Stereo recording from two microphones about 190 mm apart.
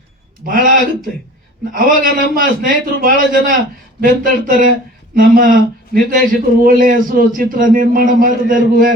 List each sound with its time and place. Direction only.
0.4 s a man's voice: 50° right (ahead or behind)
1.7 s a man's voice: 50° right (ahead or behind)